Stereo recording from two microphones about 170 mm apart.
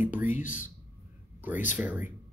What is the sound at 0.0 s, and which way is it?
Speech, 10° right (ahead or behind).